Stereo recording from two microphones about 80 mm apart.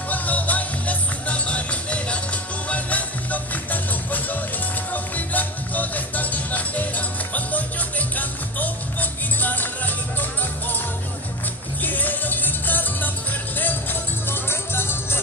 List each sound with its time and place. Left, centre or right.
0.1 s music: centre
11.8 s music: left
14.3 s music: left